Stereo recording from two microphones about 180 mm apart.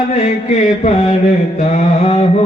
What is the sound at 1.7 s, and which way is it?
Mantra, 35° left (ahead or behind).